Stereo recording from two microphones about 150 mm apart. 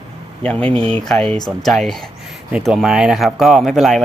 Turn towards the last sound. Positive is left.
turn(degrees=0)  # may be behind; listen again after turning